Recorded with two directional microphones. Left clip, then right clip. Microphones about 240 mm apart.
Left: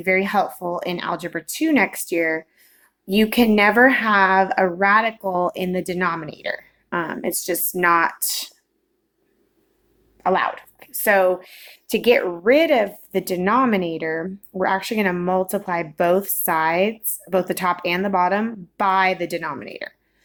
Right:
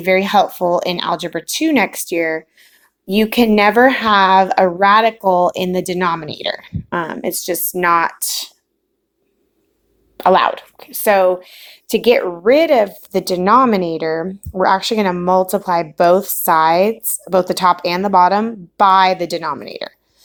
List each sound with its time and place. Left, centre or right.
0.0 s speech: right
10.2 s speech: right